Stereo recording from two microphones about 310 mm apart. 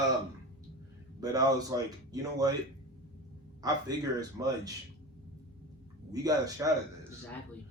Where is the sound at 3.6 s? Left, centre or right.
Centre.